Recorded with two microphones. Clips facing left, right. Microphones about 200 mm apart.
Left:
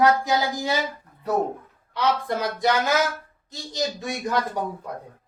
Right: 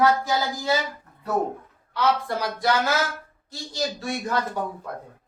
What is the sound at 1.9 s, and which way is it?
A woman's voice, 20° left (ahead or behind).